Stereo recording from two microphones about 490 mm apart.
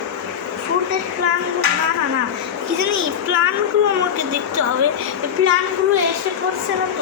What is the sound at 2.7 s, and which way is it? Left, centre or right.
Speech, right.